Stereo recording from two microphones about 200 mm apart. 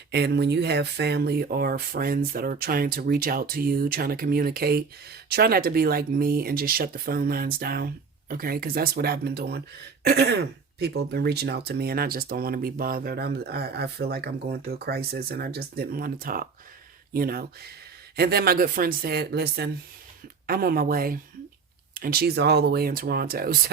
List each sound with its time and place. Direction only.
0.1 s speech: 55° right (ahead or behind)